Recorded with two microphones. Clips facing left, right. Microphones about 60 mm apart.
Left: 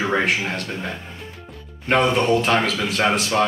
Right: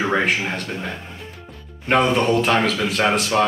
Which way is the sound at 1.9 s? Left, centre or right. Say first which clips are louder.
Even; centre.